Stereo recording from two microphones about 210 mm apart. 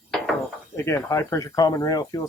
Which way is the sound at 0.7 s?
15° left (ahead or behind).